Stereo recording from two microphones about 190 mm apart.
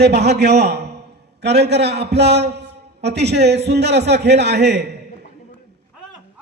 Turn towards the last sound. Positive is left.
turn(degrees=-60)  # may be behind; listen again after turning